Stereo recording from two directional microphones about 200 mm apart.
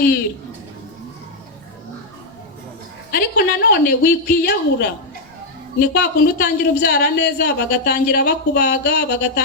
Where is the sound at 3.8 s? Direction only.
50° left (ahead or behind).